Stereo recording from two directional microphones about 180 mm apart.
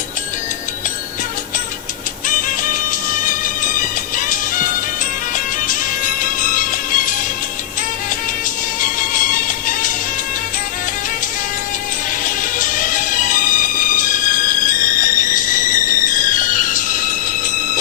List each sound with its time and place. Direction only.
2.2 s music: 45° left (ahead or behind)
8.8 s music: 45° left (ahead or behind)
12.2 s music: 50° left (ahead or behind)